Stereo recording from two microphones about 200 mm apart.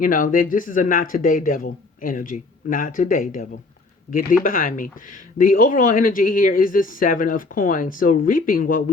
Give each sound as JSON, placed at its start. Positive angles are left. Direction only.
{"t": 0.0, "sound": "speech", "side_deg": 45}